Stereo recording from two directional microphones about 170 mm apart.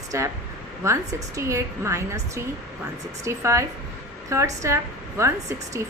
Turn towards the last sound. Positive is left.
turn(degrees=-15)  # may be behind; listen again after turning